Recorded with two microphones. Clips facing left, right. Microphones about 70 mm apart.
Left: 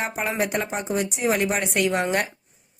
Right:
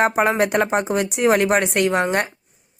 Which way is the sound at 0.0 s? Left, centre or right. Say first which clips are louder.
Right 8 dB; right.